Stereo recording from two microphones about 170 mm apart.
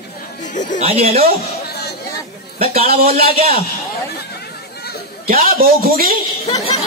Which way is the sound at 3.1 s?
60° right (ahead or behind).